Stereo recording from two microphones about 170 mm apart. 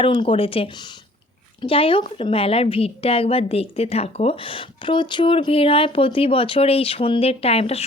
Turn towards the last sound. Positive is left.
turn(degrees=35)  # may be behind; listen again after turning